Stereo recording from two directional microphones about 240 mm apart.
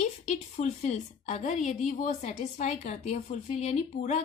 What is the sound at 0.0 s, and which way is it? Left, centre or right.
A woman's voice, left.